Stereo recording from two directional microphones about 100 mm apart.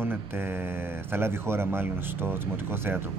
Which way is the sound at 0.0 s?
25° right (ahead or behind).